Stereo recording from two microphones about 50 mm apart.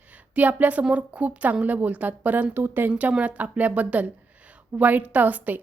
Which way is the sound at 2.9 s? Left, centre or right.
Right.